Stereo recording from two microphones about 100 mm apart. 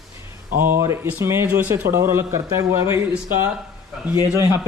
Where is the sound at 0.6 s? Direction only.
25° right (ahead or behind).